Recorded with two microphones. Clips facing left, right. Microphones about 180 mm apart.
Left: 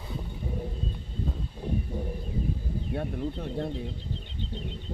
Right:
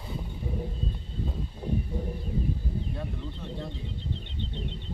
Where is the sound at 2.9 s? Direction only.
55° left (ahead or behind).